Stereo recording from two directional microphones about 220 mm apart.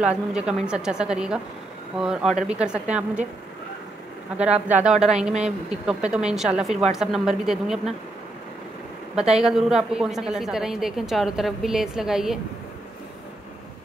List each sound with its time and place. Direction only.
0.0 s a woman's voice: 5° right (ahead or behind)
4.4 s a woman's voice: 5° right (ahead or behind)
9.4 s a woman's voice: centre (ahead or behind)